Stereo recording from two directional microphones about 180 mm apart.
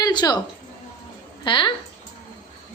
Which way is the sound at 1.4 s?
25° left (ahead or behind).